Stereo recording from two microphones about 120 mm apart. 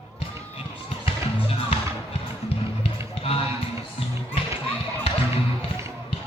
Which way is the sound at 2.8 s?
55° left (ahead or behind).